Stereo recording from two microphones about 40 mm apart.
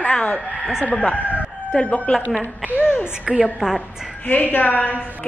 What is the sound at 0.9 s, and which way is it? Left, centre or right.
Speech, left.